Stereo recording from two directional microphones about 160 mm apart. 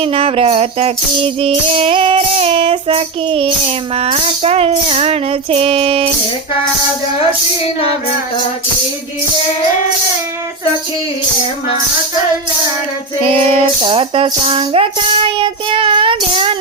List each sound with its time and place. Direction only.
0.0 s music: 35° right (ahead or behind)
13.2 s music: 35° right (ahead or behind)